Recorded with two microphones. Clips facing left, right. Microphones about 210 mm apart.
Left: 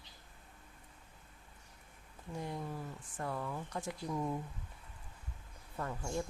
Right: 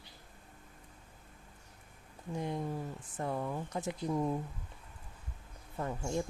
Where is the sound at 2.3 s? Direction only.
20° right (ahead or behind).